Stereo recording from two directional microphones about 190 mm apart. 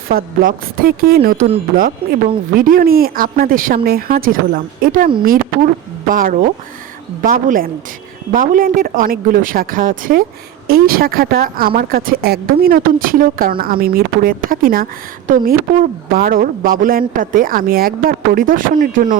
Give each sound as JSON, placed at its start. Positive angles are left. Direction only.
{"t": 0.1, "sound": "speech", "side_deg": -50}